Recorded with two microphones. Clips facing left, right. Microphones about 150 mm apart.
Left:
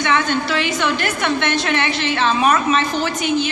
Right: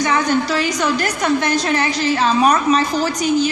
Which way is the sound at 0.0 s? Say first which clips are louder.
Right 2 dB; 40° right (ahead or behind).